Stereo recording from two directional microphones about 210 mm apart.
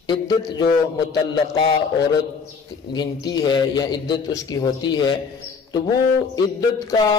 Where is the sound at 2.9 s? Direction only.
20° left (ahead or behind).